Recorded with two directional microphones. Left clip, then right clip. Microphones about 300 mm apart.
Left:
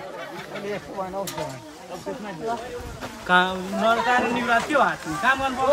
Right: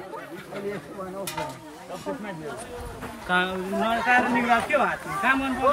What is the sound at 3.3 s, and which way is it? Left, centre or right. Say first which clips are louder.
Speech: left 4 dB; centre.